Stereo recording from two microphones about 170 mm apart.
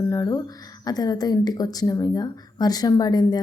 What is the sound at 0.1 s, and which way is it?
Speech, 20° left (ahead or behind).